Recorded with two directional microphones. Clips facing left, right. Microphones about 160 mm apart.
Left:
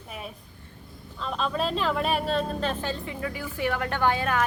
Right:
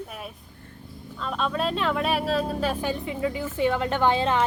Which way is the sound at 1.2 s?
Centre (ahead or behind).